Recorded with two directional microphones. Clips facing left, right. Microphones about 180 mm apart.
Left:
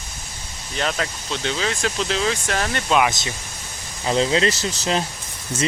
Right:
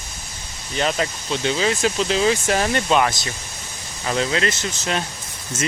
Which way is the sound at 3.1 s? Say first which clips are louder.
Even; 20° left (ahead or behind).